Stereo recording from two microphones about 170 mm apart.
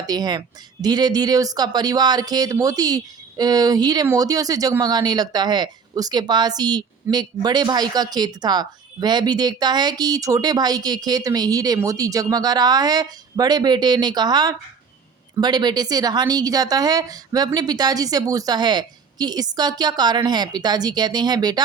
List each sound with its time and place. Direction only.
0.1 s speech: 25° right (ahead or behind)